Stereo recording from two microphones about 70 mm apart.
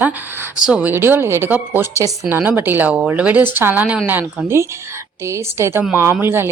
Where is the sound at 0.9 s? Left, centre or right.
Right.